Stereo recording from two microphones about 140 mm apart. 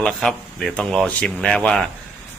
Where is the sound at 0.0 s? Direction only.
5° left (ahead or behind).